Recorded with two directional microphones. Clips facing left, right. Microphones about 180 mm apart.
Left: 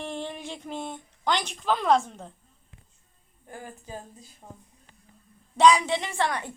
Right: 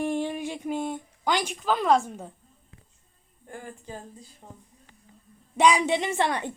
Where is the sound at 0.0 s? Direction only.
10° right (ahead or behind).